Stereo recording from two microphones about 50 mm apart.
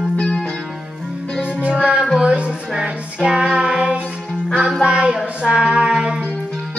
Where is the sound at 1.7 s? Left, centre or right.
Centre.